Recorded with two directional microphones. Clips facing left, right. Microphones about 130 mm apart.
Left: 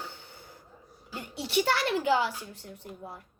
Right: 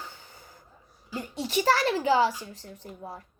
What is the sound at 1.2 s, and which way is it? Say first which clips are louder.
A child's voice: right 1 dB; 35° right (ahead or behind).